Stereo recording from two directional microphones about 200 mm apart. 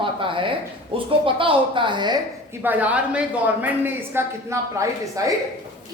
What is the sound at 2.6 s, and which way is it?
A woman's voice, 10° right (ahead or behind).